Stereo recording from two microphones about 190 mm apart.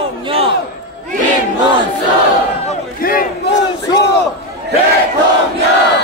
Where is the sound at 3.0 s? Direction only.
50° left (ahead or behind).